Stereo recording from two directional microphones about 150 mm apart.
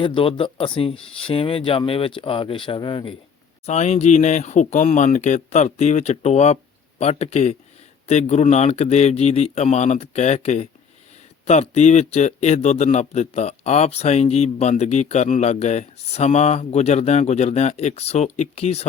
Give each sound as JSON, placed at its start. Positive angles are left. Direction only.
{"t": 0.0, "sound": "speech", "side_deg": 35}
{"t": 3.7, "sound": "a man's voice", "side_deg": 50}